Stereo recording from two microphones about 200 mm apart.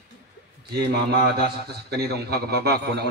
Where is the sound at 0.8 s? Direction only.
55° right (ahead or behind).